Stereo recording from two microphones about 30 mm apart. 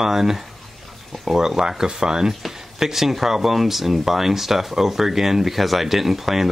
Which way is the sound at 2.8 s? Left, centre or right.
Centre.